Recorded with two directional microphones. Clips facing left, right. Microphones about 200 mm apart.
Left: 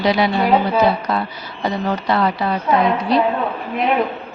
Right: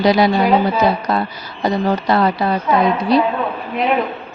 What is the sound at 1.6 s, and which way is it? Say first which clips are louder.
Speech: right 4 dB; 40° right (ahead or behind).